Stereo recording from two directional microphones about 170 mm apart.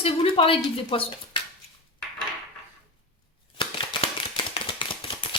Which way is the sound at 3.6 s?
30° left (ahead or behind).